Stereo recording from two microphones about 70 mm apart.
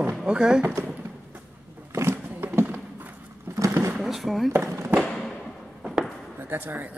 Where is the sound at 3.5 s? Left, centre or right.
Right.